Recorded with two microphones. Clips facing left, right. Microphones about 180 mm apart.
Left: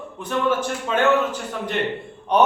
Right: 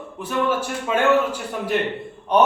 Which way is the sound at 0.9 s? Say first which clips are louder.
Right 1 dB; 5° right (ahead or behind).